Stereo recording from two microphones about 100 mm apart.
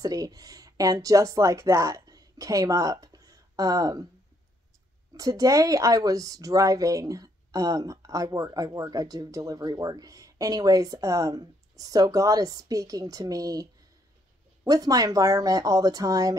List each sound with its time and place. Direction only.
0.0 s speech: 40° right (ahead or behind)
5.1 s speech: 35° right (ahead or behind)